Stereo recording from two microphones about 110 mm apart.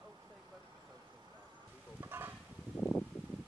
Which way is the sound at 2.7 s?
15° left (ahead or behind).